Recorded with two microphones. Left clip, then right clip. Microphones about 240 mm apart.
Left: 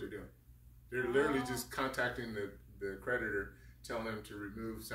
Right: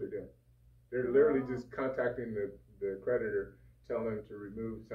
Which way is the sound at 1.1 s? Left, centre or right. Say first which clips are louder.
Right 6 dB; left.